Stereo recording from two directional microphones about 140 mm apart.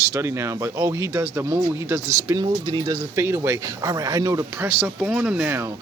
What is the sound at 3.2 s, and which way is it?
Speech, 20° right (ahead or behind).